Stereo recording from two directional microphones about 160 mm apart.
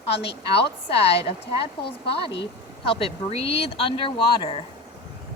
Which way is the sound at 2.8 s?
35° left (ahead or behind).